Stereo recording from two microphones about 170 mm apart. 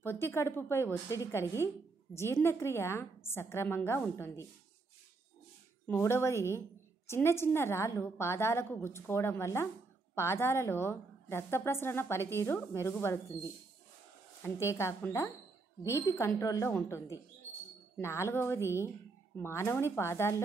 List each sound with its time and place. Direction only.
0.0 s a woman's voice: 15° left (ahead or behind)
5.9 s a woman's voice: 15° left (ahead or behind)